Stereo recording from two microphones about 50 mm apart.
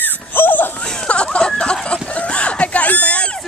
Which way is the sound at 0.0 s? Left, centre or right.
Left.